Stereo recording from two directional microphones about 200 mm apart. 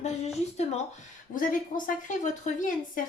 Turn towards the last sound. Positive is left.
turn(degrees=40)  # may be behind; listen again after turning